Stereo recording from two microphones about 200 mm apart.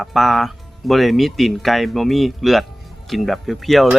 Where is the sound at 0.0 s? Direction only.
Centre (ahead or behind).